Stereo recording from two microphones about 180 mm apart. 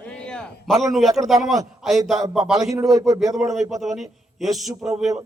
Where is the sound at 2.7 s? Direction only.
20° right (ahead or behind).